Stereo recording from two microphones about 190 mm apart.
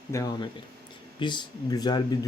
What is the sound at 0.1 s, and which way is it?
Speech, 20° left (ahead or behind).